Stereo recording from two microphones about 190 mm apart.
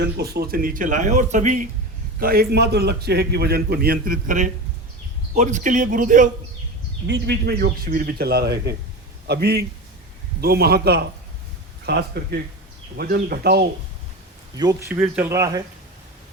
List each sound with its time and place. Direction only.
0.0 s speech: 55° right (ahead or behind); by 1.6 s 40° right (ahead or behind)
2.2 s a man's voice: 50° right (ahead or behind)
7.1 s a man's voice: 60° right (ahead or behind)
14.5 s speech: 20° right (ahead or behind)